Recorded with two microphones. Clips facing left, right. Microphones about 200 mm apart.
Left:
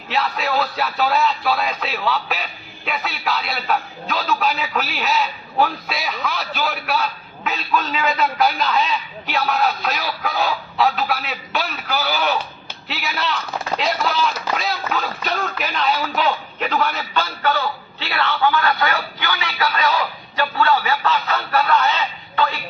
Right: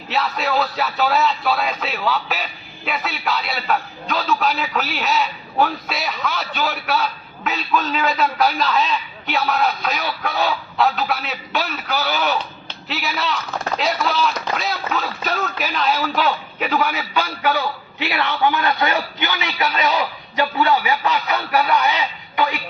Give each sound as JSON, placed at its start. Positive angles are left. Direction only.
{"t": 0.1, "sound": "a man's voice", "side_deg": 0}